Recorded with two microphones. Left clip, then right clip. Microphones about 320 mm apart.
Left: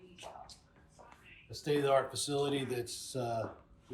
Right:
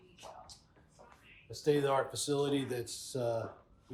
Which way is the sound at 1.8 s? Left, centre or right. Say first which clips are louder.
Left 2 dB; centre.